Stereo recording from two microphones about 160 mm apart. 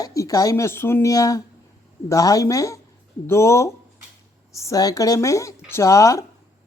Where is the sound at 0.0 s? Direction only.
20° left (ahead or behind).